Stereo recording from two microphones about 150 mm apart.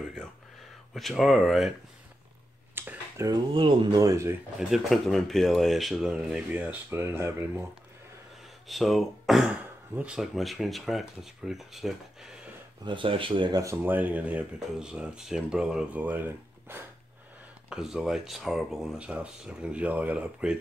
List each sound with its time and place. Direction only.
0.9 s speech: centre (ahead or behind)
2.7 s a sound: 15° right (ahead or behind)
3.3 s speech: 30° right (ahead or behind)
4.6 s speech: centre (ahead or behind)
8.6 s speech: centre (ahead or behind)
12.8 s speech: 35° right (ahead or behind); by 16.8 s 15° right (ahead or behind)
17.6 s speech: 5° right (ahead or behind)